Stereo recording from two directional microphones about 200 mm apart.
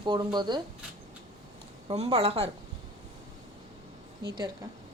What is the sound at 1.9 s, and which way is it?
Speech, 30° right (ahead or behind).